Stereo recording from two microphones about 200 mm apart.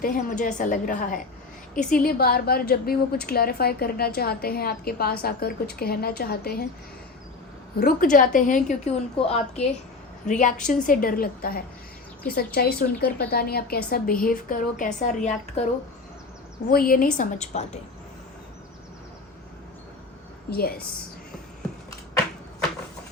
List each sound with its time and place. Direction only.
0.0 s a woman's voice: 45° left (ahead or behind)
7.8 s a woman's voice: 45° left (ahead or behind)
16.7 s a woman's voice: 45° left (ahead or behind)
17.2 s a woman's voice: 35° left (ahead or behind)
20.5 s a woman's voice: 50° left (ahead or behind)